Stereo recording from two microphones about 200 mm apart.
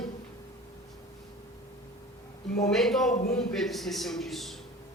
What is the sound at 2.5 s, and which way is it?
A man's voice, centre (ahead or behind).